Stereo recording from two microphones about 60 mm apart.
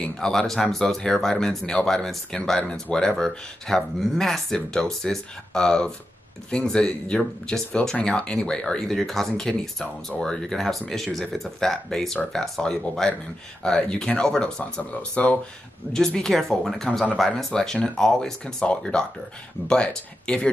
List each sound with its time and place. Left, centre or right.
0.0 s speech: centre
14.6 s speech: left
16.3 s speech: centre